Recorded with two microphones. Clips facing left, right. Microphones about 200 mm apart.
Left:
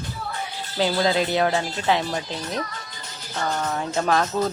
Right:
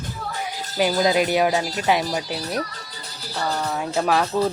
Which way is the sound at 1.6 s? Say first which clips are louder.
Right 2 dB; 40° right (ahead or behind).